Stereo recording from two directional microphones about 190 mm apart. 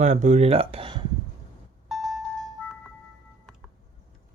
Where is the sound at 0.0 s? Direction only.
35° right (ahead or behind).